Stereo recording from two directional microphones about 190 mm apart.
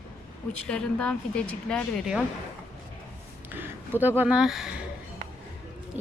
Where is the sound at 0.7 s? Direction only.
5° left (ahead or behind).